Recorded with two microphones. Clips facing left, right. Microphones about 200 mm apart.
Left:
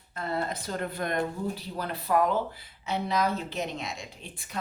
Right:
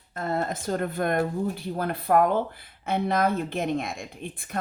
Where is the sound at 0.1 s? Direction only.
45° right (ahead or behind).